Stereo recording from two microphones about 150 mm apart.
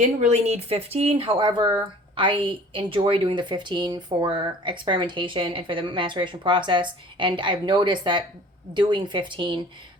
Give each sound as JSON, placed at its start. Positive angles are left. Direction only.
{"t": 0.0, "sound": "a woman's voice", "side_deg": -50}